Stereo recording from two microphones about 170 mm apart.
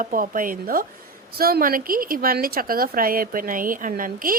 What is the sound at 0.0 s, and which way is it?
A woman's voice, 50° right (ahead or behind).